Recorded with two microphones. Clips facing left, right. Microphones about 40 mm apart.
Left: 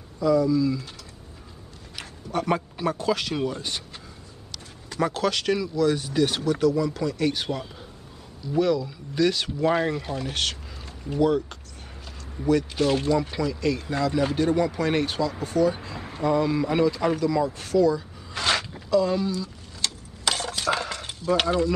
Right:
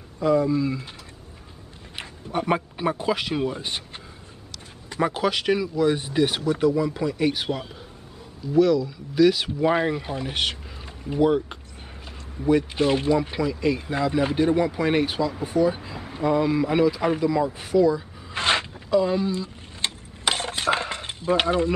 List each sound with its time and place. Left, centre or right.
0.2 s speech: right
2.3 s speech: right
4.8 s speech: centre
8.5 s speech: centre
18.3 s a sound: right